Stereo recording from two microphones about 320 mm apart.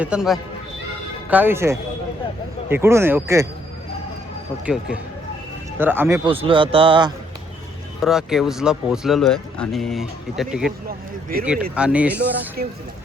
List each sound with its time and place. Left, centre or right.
0.0 s a man's voice: centre
4.6 s a man's voice: centre
8.0 s speech: centre
10.8 s speech: right
11.7 s speech: centre
12.6 s speech: right